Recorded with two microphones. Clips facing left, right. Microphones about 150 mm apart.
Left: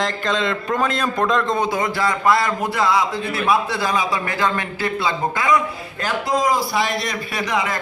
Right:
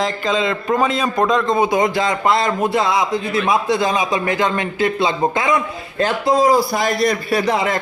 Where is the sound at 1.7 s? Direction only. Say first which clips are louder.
Right 4 dB; 20° right (ahead or behind).